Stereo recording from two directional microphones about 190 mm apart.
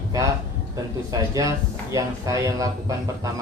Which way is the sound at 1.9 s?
15° right (ahead or behind).